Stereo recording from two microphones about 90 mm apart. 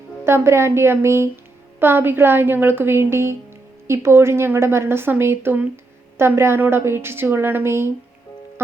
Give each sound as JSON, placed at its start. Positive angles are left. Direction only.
{"t": 0.3, "sound": "a woman's voice", "side_deg": -30}